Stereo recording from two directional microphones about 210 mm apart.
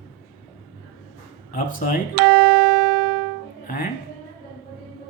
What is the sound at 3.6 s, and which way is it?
Speech, 40° left (ahead or behind).